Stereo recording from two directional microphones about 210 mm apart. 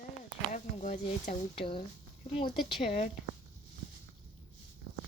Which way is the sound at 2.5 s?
Centre (ahead or behind).